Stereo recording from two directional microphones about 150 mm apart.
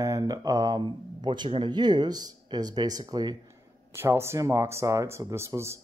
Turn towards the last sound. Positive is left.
turn(degrees=-20)  # may be behind; listen again after turning